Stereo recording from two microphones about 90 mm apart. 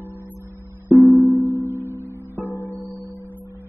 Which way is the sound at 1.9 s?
25° right (ahead or behind).